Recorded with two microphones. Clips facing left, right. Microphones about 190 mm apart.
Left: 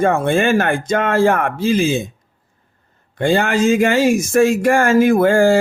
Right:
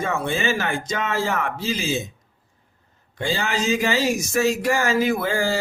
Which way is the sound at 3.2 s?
55° left (ahead or behind).